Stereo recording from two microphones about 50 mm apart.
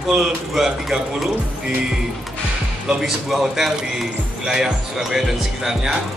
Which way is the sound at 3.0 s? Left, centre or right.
Centre.